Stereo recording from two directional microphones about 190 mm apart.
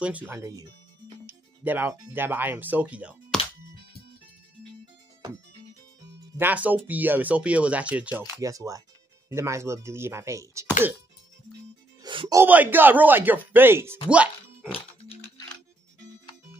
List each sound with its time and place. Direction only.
0.0 s speech: 10° right (ahead or behind)
6.3 s speech: 10° right (ahead or behind)
8.4 s speech: 20° right (ahead or behind)
12.0 s music: 25° right (ahead or behind)
12.4 s speech: 10° right (ahead or behind)
14.0 s music: 5° right (ahead or behind)